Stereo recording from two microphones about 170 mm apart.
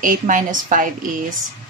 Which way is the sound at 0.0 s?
50° right (ahead or behind).